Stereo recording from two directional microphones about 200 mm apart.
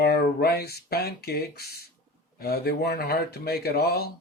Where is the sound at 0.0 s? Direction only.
50° left (ahead or behind).